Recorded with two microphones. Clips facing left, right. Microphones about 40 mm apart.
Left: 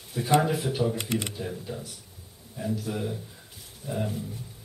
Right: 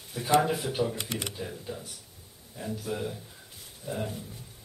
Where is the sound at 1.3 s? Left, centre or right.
Centre.